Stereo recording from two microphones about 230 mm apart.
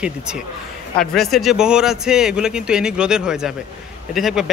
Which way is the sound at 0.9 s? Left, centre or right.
Centre.